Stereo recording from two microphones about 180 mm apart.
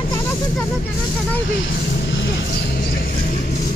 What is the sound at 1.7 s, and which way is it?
Vehicle, 80° left.